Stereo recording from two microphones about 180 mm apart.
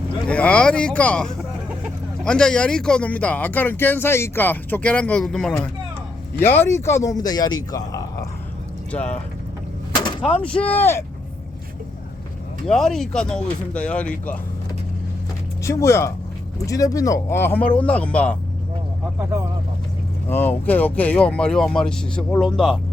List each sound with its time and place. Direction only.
0.3 s speech: 5° left (ahead or behind)
8.9 s speech: 5° left (ahead or behind)
9.9 s a sound: 25° left (ahead or behind)
10.5 s speech: 10° left (ahead or behind)
12.6 s speech: centre (ahead or behind)
15.6 s speech: 15° left (ahead or behind)
20.2 s speech: 10° left (ahead or behind)